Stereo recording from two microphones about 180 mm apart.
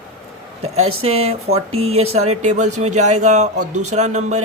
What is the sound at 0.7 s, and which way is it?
Speech, 35° right (ahead or behind).